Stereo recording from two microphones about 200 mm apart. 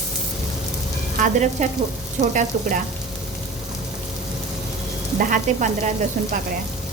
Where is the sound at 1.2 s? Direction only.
35° right (ahead or behind).